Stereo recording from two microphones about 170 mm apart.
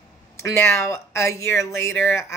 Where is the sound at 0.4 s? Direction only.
15° left (ahead or behind).